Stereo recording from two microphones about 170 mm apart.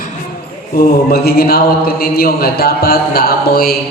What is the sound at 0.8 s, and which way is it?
Speech, 65° left (ahead or behind).